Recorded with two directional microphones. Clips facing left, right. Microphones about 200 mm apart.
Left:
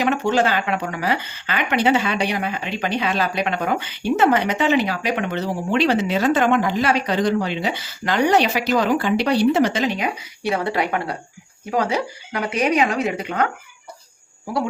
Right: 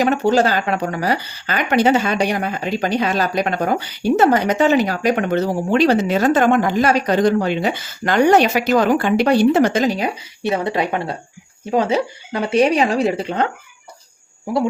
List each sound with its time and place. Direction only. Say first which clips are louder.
0.0 s speech: right 4 dB; 40° right (ahead or behind)
10.4 s speech: right 2 dB; 20° right (ahead or behind)